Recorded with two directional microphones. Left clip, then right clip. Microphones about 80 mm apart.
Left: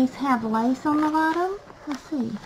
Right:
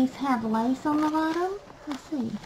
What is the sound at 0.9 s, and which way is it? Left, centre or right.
A child's voice, centre.